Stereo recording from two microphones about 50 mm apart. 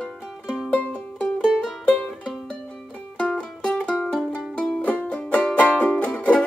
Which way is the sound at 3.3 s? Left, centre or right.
Left.